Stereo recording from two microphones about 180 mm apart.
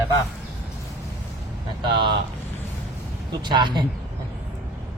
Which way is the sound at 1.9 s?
25° right (ahead or behind).